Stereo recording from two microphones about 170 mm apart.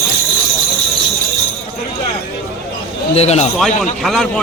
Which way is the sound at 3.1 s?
40° left (ahead or behind).